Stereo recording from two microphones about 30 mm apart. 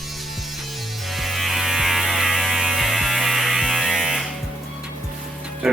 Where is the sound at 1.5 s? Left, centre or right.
Centre.